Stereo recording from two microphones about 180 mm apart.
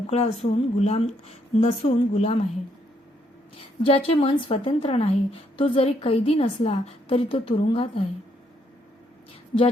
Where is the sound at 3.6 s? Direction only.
30° left (ahead or behind).